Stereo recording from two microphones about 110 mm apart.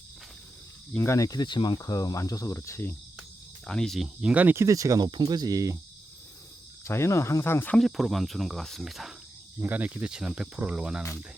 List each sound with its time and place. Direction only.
0.9 s speech: 25° left (ahead or behind)
3.7 s speech: 5° left (ahead or behind); by 5.8 s 30° right (ahead or behind)
6.8 s speech: 25° left (ahead or behind)
7.8 s speech: centre (ahead or behind)
9.6 s speech: 15° right (ahead or behind)